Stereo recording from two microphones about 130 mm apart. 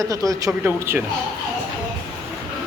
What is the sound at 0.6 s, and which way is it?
Speech, 15° right (ahead or behind).